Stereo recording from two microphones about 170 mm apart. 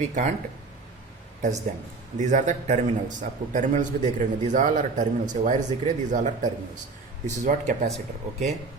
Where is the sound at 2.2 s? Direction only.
45° right (ahead or behind).